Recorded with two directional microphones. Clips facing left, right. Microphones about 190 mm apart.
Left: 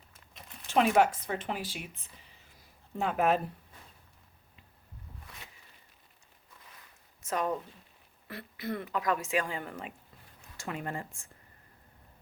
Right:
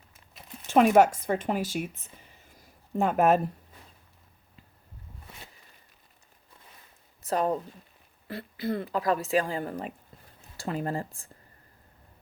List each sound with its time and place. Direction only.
0.9 s a woman's voice: 45° right (ahead or behind)
7.2 s a woman's voice: 35° right (ahead or behind)